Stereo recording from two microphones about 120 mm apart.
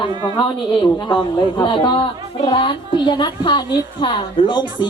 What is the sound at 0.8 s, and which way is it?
A man's voice, 45° left (ahead or behind).